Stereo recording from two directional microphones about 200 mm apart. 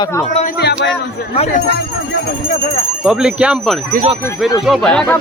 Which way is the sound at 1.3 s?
30° left (ahead or behind).